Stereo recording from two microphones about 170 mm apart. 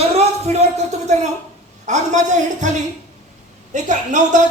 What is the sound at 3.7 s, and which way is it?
Speech, 45° right (ahead or behind).